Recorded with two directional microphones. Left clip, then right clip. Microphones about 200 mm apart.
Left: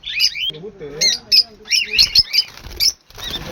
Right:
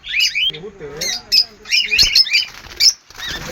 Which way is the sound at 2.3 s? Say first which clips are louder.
Right 2 dB; 60° left (ahead or behind).